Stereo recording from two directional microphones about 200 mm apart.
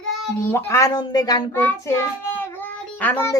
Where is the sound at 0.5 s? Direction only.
15° left (ahead or behind).